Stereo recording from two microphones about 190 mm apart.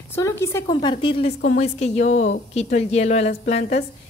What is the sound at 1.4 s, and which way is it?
A woman's voice, 40° left (ahead or behind).